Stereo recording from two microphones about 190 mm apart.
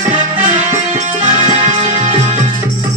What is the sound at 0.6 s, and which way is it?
Music, 40° right (ahead or behind).